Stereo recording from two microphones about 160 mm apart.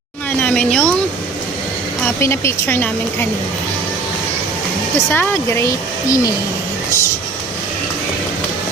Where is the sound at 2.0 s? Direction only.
15° left (ahead or behind).